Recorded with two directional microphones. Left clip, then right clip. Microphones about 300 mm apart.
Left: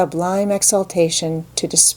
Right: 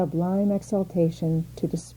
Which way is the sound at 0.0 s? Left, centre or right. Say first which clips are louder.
Left 8 dB; centre.